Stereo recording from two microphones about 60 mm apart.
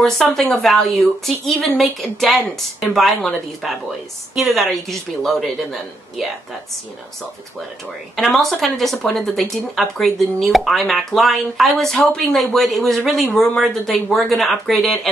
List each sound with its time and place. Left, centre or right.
0.0 s speech: centre
8.2 s speech: centre